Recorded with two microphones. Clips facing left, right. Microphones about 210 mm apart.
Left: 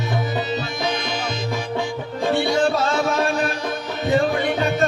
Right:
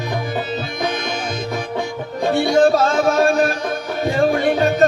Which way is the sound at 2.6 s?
45° right (ahead or behind).